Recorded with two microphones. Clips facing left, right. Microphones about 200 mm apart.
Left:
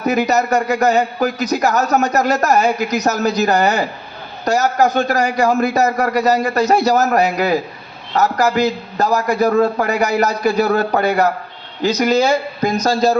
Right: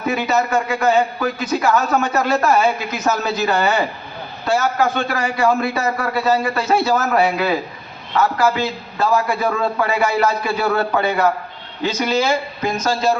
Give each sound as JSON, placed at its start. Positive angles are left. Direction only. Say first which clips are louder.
{"t": 0.0, "sound": "a man's voice", "louder": "left 3 dB", "side_deg": 40}